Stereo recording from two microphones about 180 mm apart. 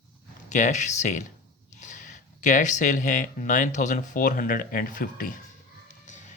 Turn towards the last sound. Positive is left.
turn(degrees=40)  # may be behind; listen again after turning